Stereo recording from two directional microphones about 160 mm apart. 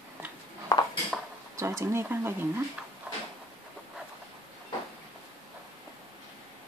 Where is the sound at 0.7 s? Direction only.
25° left (ahead or behind).